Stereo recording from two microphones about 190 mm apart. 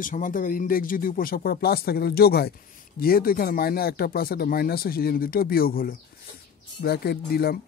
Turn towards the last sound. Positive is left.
turn(degrees=55)  # may be behind; listen again after turning